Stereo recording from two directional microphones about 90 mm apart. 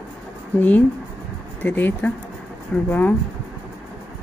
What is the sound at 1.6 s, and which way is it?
Speech, 20° left (ahead or behind).